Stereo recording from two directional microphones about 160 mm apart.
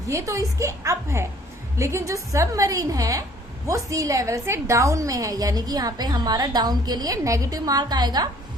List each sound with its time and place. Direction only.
0.1 s a woman's voice: 20° right (ahead or behind)